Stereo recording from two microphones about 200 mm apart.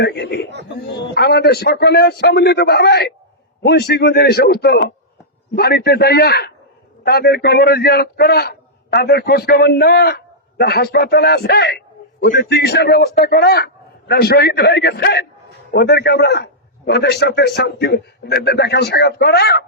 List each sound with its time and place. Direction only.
0.0 s a man's voice: 55° left (ahead or behind)